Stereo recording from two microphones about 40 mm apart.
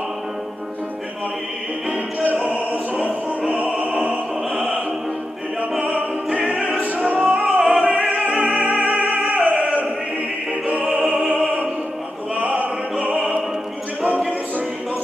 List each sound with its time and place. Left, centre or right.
1.9 s music: right
5.6 s opera: right
7.2 s music: right
7.5 s opera: right
11.2 s opera: right
12.4 s opera: right